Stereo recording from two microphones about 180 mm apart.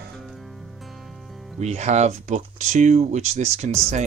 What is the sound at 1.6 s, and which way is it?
Speech, 40° right (ahead or behind).